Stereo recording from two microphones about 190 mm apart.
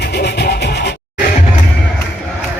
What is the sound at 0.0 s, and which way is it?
Music, 60° left (ahead or behind).